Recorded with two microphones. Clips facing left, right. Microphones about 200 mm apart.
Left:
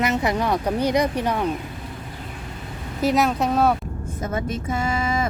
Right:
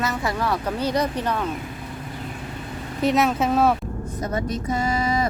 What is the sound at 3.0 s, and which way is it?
Speech, centre (ahead or behind).